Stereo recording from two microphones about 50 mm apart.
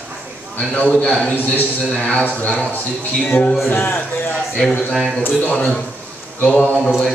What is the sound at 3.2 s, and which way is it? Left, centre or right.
Speech, left.